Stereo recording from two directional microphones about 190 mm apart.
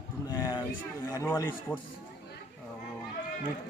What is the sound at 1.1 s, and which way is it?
Speech, 15° left (ahead or behind).